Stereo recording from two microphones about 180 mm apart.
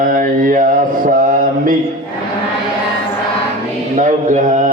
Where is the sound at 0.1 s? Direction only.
50° right (ahead or behind).